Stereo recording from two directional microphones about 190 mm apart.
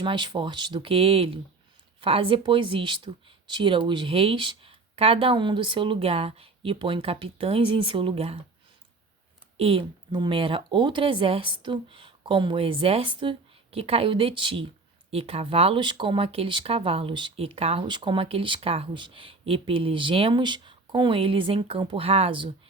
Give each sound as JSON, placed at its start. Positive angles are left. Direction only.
{"t": 0.0, "sound": "speech", "side_deg": -25}
{"t": 9.6, "sound": "speech", "side_deg": -30}